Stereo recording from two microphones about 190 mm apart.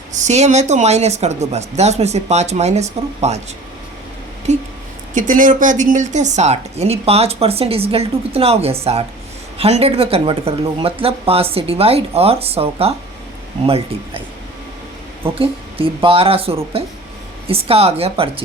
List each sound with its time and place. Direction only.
0.1 s a woman's voice: 40° right (ahead or behind)
4.5 s a woman's voice: 40° right (ahead or behind)
15.2 s a woman's voice: 30° right (ahead or behind)